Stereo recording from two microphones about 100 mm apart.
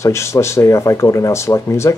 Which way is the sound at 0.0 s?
30° left (ahead or behind).